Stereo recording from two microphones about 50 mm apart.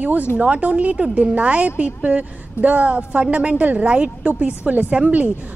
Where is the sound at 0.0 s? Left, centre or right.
Right.